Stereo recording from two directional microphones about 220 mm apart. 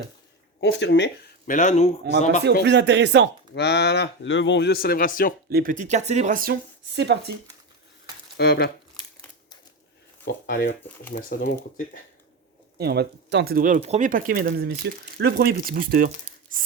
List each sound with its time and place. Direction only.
0.6 s speech: 55° left (ahead or behind)
1.5 s speech: 35° left (ahead or behind)
2.4 s speech: 50° right (ahead or behind)
3.5 s speech: 50° left (ahead or behind)
5.5 s speech: 40° right (ahead or behind)
8.4 s speech: 45° left (ahead or behind)
10.2 s speech: 40° left (ahead or behind)
12.7 s speech: 45° right (ahead or behind)